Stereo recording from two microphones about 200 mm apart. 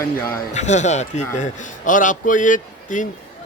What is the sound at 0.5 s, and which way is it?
Speech, 35° left (ahead or behind).